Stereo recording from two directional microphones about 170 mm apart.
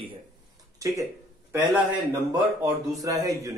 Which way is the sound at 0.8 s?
20° right (ahead or behind).